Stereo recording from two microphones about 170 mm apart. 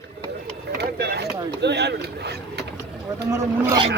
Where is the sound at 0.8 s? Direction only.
70° right (ahead or behind).